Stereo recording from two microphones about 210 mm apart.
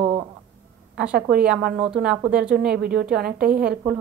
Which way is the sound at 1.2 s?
5° right (ahead or behind).